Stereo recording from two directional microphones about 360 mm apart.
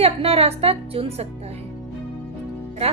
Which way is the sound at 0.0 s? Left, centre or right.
Centre.